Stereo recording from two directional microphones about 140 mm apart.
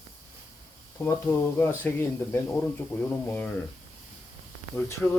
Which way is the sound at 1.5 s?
15° left (ahead or behind).